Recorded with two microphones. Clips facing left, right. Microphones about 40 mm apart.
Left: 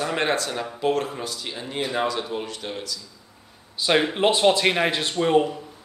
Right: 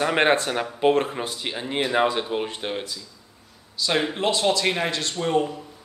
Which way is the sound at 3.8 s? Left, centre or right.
Centre.